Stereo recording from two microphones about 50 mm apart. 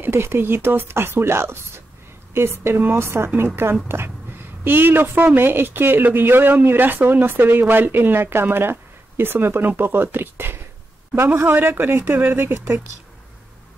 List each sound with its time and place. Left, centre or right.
0.0 s a woman's voice: right
3.9 s a sound: right
5.3 s speech: right